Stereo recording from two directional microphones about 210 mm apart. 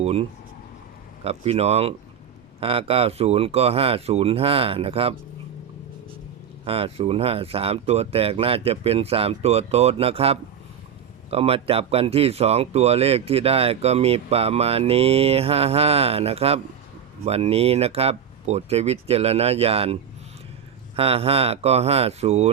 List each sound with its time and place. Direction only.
0.0 s speech: 30° right (ahead or behind)
6.7 s speech: 25° right (ahead or behind)